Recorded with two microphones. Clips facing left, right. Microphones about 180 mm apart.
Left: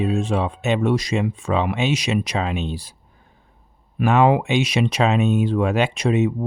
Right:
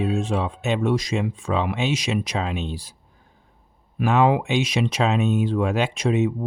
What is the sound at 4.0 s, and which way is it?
Speech, 60° left (ahead or behind).